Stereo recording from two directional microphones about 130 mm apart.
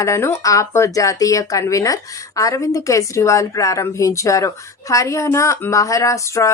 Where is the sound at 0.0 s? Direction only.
20° left (ahead or behind).